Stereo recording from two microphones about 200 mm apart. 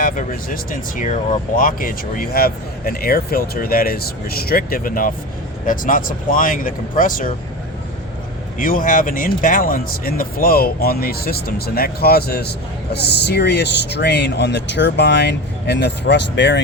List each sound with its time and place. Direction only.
0.0 s speech: 45° left (ahead or behind)
8.5 s speech: 45° left (ahead or behind); by 16.6 s 60° left (ahead or behind)